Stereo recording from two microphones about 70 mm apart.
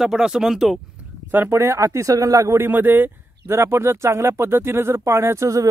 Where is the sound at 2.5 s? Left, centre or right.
Right.